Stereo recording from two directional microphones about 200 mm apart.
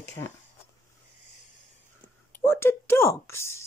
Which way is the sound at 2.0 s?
10° left (ahead or behind).